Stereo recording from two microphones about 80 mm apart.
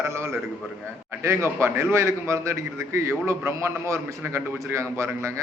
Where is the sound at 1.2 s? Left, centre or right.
Right.